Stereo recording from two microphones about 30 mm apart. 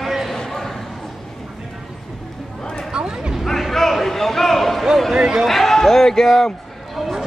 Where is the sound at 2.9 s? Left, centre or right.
Right.